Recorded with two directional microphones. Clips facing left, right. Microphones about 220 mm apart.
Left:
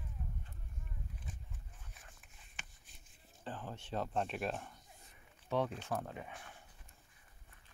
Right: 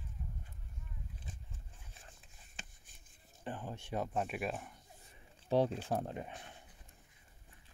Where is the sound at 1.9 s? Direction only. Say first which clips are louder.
Right 2 dB; 30° right (ahead or behind).